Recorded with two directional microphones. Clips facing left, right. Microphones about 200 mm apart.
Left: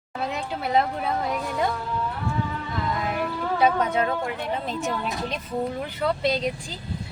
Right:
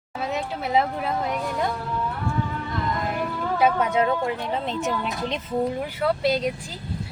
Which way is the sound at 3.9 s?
25° right (ahead or behind).